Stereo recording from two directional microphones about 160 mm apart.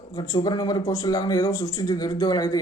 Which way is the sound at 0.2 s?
25° left (ahead or behind).